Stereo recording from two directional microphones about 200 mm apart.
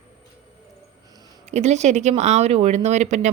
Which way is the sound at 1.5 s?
35° right (ahead or behind).